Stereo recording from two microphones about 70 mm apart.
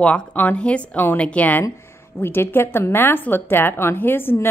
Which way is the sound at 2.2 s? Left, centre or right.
Left.